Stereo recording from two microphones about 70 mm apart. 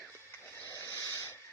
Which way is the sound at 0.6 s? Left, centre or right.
Right.